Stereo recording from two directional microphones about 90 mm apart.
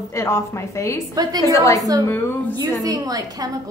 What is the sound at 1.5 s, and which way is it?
Speech, 35° left (ahead or behind).